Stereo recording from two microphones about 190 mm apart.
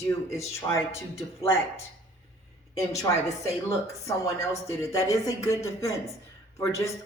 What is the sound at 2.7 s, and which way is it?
Speech, 15° left (ahead or behind).